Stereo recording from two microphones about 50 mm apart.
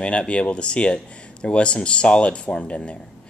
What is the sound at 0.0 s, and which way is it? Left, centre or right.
Speech, left.